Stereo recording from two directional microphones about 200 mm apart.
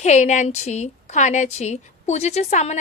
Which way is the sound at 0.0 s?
35° left (ahead or behind).